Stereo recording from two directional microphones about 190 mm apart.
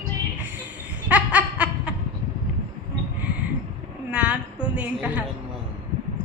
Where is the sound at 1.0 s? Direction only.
5° right (ahead or behind).